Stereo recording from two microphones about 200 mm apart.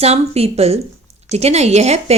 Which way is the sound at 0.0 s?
30° right (ahead or behind).